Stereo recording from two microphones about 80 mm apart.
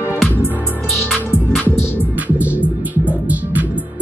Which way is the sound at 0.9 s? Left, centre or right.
Centre.